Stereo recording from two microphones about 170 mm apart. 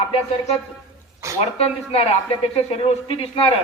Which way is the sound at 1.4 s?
35° left (ahead or behind).